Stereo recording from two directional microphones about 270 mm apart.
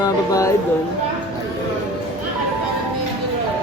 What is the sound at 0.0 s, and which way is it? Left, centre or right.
Music, centre.